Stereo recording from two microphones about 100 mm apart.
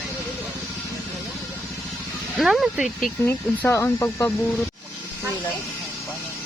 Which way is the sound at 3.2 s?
25° left (ahead or behind).